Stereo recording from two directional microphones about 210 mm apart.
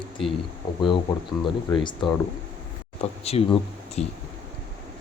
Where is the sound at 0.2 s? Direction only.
Centre (ahead or behind).